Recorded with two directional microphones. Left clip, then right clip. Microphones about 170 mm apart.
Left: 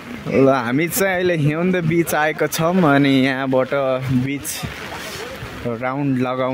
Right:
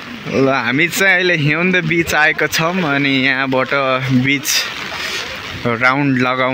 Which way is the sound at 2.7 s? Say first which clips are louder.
Even; 30° left (ahead or behind).